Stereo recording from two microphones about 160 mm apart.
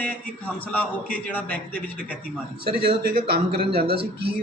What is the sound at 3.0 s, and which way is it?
Speech, 70° right (ahead or behind).